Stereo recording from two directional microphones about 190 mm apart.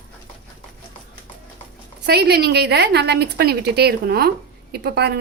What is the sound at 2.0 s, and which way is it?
A woman's voice, 55° right (ahead or behind).